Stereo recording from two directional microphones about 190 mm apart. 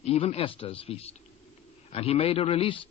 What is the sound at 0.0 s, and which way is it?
A man's voice, 35° left (ahead or behind).